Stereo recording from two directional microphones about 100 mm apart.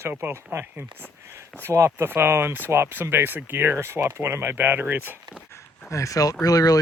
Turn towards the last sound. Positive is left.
turn(degrees=40)  # may be behind; listen again after turning